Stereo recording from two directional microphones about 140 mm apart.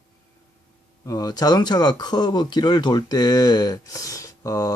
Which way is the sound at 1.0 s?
25° left (ahead or behind).